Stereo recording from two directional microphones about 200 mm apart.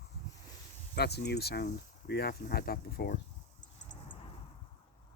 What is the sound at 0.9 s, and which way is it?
Speech, 55° left (ahead or behind).